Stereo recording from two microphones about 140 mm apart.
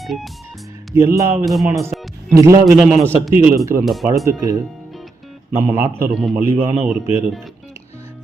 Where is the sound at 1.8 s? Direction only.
20° right (ahead or behind).